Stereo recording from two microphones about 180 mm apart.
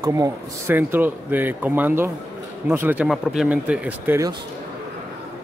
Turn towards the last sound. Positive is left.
turn(degrees=-10)  # may be behind; listen again after turning